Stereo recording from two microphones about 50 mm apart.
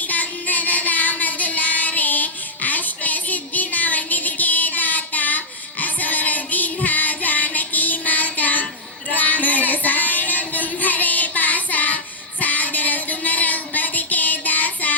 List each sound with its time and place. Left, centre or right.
0.0 s music: left
12.4 s child singing: left